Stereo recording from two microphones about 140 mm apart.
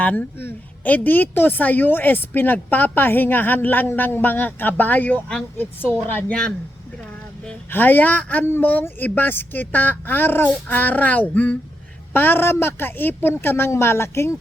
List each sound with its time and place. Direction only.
0.0 s a woman's voice: 10° left (ahead or behind)